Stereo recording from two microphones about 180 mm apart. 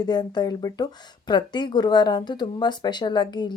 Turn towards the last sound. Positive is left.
turn(degrees=25)  # may be behind; listen again after turning